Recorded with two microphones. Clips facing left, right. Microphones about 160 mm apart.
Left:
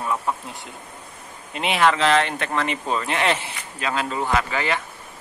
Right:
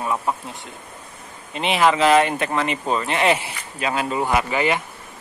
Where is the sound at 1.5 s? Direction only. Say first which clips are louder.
Right 1 dB; centre (ahead or behind); by 4.8 s 15° right (ahead or behind).